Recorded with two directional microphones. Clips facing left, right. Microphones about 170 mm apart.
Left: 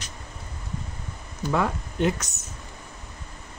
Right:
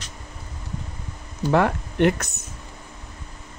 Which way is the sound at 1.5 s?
65° right (ahead or behind).